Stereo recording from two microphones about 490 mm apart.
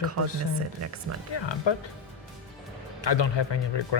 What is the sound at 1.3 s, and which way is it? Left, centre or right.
Speech, left.